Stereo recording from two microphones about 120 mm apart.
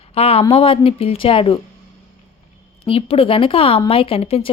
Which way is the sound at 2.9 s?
50° left (ahead or behind).